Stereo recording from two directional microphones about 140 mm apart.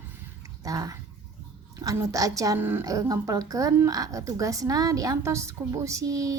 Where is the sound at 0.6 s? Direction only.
25° right (ahead or behind).